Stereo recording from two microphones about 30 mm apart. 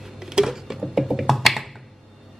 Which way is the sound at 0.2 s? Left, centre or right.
Right.